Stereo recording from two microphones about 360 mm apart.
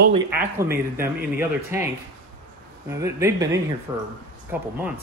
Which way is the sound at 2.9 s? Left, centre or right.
Centre.